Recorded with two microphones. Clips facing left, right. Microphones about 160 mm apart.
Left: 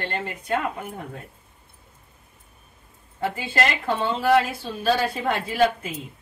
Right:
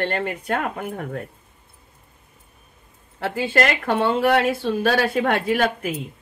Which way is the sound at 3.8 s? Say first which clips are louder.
Right 3 dB; 75° right (ahead or behind).